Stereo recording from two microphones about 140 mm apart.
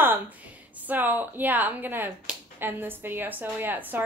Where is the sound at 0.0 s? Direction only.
10° right (ahead or behind).